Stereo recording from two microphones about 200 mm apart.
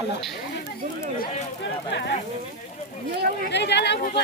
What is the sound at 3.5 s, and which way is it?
Speech, 60° left (ahead or behind).